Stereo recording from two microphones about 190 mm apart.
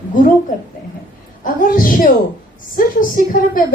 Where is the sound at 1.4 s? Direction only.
45° left (ahead or behind).